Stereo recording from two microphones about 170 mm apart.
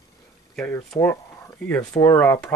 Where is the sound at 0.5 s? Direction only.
5° left (ahead or behind).